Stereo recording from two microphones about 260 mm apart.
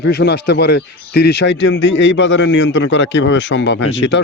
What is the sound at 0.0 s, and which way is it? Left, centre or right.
Speech, left.